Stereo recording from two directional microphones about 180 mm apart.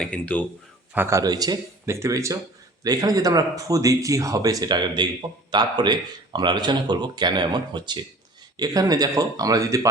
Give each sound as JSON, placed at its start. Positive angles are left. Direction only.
{"t": 0.0, "sound": "speech", "side_deg": 5}
{"t": 0.9, "sound": "speech", "side_deg": -15}